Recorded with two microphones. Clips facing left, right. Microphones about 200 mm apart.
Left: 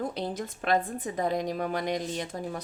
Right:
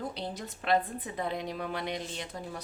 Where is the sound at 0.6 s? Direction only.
50° left (ahead or behind).